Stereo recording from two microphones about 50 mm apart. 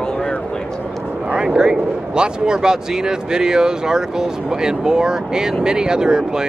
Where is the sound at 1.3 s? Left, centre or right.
Centre.